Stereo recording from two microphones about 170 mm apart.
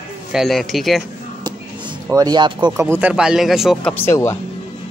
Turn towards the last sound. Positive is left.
turn(degrees=15)  # may be behind; listen again after turning